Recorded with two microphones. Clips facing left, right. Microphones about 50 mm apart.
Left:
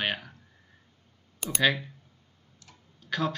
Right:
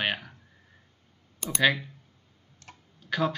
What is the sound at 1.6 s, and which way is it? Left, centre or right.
Speech, centre.